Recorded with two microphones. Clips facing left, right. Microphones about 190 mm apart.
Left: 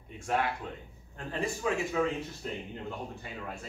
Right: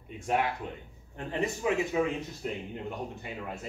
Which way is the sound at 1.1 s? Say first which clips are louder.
Right 2 dB; 20° right (ahead or behind).